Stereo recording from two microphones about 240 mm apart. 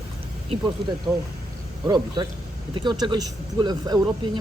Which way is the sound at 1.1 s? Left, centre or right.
Centre.